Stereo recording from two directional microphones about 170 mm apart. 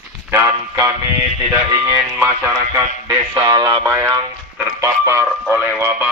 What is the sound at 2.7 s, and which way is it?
Speech, 20° right (ahead or behind).